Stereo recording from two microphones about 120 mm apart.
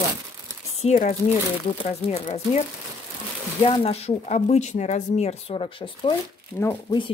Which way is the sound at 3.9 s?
60° left (ahead or behind).